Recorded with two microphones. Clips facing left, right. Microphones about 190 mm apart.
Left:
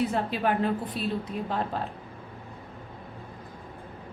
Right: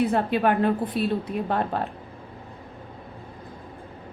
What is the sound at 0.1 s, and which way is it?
A woman's voice, 60° right (ahead or behind).